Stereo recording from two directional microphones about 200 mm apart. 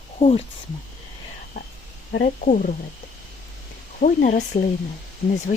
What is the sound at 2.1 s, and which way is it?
Speech, 40° left (ahead or behind).